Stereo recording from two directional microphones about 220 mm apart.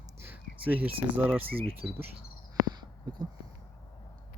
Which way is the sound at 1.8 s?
5° right (ahead or behind).